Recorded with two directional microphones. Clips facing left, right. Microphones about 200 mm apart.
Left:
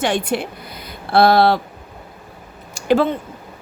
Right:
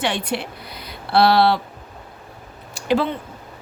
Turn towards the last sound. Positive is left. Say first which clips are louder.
# left 4 dB
turn(degrees=45)  # may be behind; listen again after turning